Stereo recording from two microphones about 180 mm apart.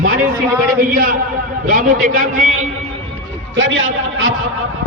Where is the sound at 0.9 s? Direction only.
55° right (ahead or behind).